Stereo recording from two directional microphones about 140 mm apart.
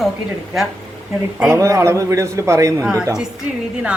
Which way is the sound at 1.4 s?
20° right (ahead or behind).